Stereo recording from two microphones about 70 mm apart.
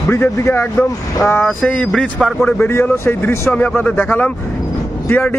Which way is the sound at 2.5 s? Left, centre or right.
Left.